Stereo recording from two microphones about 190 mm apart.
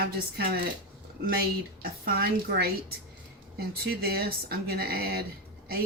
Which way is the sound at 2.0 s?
55° right (ahead or behind).